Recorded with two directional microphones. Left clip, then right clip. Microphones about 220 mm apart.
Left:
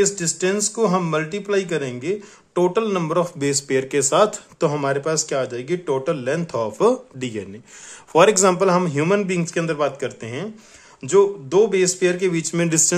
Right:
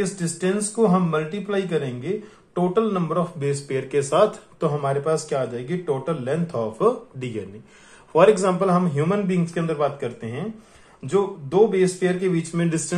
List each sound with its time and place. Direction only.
0.0 s a man's voice: 45° left (ahead or behind)